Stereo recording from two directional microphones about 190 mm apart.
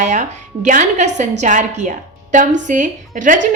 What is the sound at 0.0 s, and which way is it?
A woman's voice, 40° right (ahead or behind).